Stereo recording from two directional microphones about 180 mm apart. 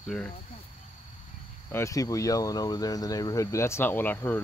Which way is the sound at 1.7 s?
15° left (ahead or behind).